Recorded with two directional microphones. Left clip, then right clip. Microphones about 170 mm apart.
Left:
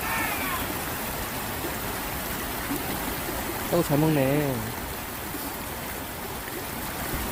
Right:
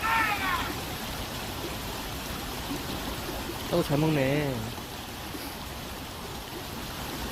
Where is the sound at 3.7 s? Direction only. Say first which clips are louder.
Left 2 dB; 15° left (ahead or behind).